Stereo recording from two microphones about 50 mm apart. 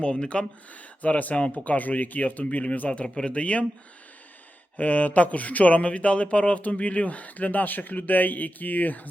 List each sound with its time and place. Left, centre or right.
0.0 s speech: centre
4.8 s speech: left